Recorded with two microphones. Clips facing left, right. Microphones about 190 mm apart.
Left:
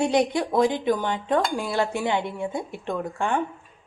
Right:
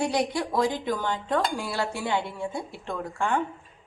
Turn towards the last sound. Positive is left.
turn(degrees=20)  # may be behind; listen again after turning